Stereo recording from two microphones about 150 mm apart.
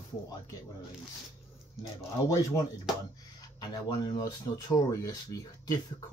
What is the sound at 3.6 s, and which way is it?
Speech, 30° left (ahead or behind).